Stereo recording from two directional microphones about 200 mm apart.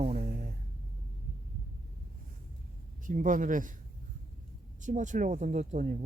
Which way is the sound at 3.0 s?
40° right (ahead or behind).